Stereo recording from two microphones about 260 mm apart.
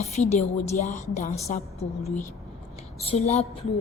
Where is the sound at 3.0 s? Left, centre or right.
Left.